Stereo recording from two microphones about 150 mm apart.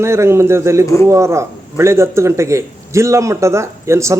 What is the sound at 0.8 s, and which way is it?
Speech, 20° left (ahead or behind).